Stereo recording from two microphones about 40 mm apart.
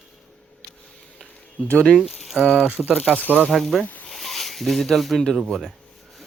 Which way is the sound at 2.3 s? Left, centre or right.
Left.